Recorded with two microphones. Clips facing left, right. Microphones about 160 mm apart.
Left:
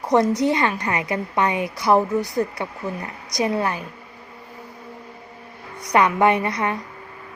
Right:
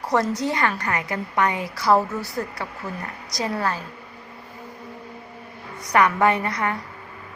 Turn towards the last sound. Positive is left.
turn(degrees=20)  # may be behind; listen again after turning